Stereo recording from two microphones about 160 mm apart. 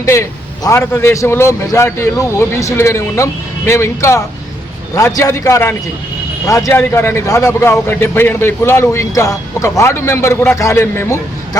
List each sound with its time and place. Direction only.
0.0 s a man's voice: 15° left (ahead or behind)